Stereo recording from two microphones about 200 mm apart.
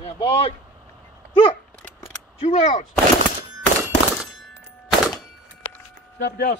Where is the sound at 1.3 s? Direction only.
25° left (ahead or behind).